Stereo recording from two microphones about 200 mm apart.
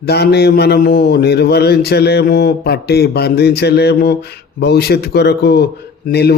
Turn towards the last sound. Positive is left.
turn(degrees=55)  # may be behind; listen again after turning